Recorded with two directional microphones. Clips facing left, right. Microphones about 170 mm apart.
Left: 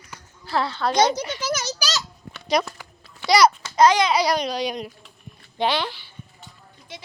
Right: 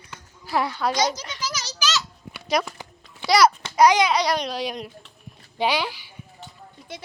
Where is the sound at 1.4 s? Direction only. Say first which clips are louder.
Left 6 dB; 55° left (ahead or behind).